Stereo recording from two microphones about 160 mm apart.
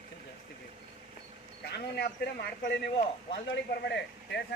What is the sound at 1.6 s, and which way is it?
Speech, 85° left.